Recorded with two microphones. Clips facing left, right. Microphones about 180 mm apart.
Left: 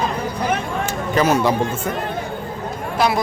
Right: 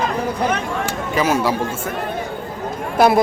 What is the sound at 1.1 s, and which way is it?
Speech, 5° right (ahead or behind).